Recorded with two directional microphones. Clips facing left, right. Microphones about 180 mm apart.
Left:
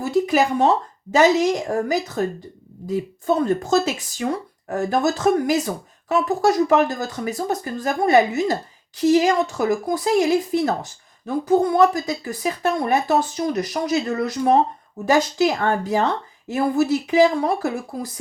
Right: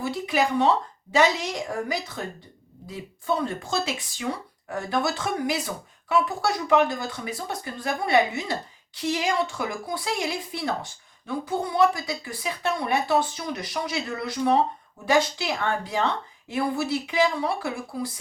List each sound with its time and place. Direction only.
0.0 s speech: 45° left (ahead or behind)